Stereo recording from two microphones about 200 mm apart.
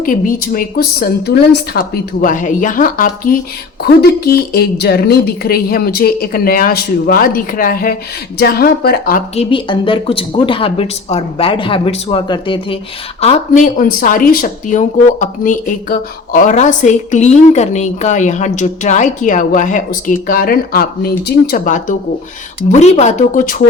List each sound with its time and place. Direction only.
0.0 s a woman's voice: 45° left (ahead or behind)
9.3 s speech: 30° left (ahead or behind)